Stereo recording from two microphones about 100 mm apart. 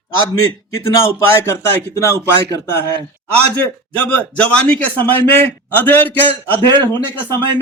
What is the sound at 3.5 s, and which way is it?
A man's voice, 15° left (ahead or behind).